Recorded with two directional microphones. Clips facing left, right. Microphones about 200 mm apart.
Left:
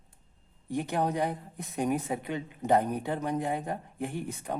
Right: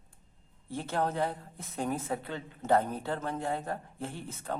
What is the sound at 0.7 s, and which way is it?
A woman's voice, 15° left (ahead or behind).